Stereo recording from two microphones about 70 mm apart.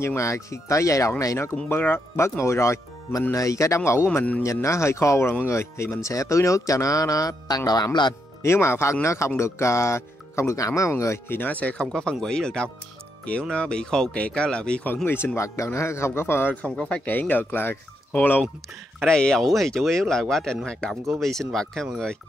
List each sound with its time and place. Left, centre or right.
0.0 s speech: left
1.7 s a man's voice: left
8.4 s a man's voice: left
11.2 s speech: left
11.9 s speech: centre
15.0 s a man's voice: left
15.3 s a man's voice: left
16.6 s speech: centre
17.0 s speech: left
19.0 s speech: centre